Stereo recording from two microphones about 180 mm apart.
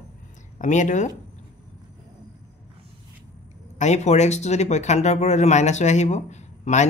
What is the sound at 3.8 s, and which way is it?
Speech, 40° left (ahead or behind).